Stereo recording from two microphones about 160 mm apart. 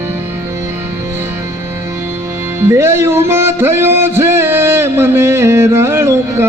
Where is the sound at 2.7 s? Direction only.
15° right (ahead or behind).